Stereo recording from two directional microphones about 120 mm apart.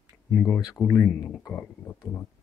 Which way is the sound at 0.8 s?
15° left (ahead or behind).